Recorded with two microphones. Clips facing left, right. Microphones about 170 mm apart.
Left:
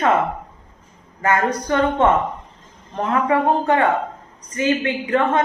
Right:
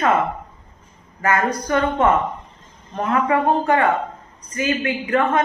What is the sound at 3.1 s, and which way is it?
A man's voice, 25° left (ahead or behind).